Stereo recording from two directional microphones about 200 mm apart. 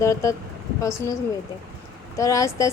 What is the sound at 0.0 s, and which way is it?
A woman's voice, 15° left (ahead or behind).